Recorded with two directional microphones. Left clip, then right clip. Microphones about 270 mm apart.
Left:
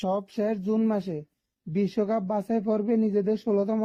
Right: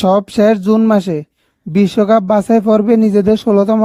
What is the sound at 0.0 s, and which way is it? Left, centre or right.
Speech, right.